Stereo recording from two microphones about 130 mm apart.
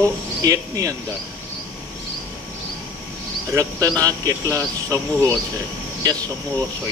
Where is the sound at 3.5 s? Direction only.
25° right (ahead or behind).